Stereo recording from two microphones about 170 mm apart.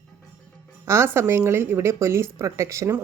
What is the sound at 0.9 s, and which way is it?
Speech, 15° right (ahead or behind).